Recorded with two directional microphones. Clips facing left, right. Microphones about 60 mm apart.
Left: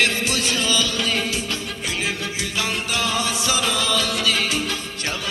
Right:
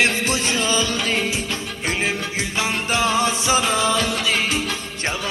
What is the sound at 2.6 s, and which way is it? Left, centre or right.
Music, right.